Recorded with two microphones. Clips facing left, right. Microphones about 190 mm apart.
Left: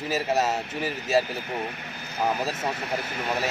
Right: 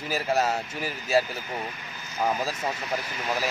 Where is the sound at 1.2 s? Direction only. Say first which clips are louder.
Left 3 dB; 65° left (ahead or behind).